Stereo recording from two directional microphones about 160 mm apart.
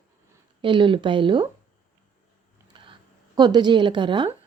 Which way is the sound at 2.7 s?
30° right (ahead or behind).